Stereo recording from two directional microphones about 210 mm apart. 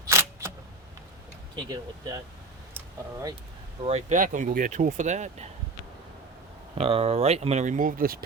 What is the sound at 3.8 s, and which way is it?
Speech, 35° right (ahead or behind).